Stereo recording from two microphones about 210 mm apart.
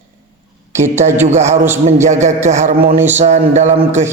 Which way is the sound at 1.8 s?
35° right (ahead or behind).